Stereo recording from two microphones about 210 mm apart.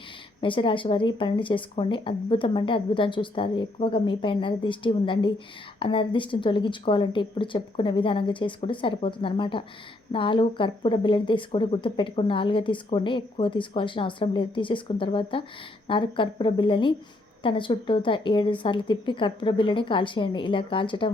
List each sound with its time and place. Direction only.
0.4 s speech: 25° left (ahead or behind)